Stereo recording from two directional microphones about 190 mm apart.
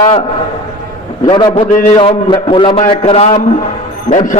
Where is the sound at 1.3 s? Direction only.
25° left (ahead or behind); by 4.3 s 40° left (ahead or behind).